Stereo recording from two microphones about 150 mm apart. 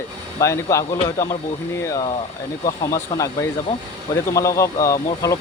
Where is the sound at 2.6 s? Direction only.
20° left (ahead or behind).